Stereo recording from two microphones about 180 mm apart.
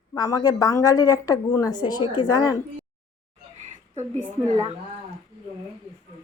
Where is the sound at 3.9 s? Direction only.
35° right (ahead or behind).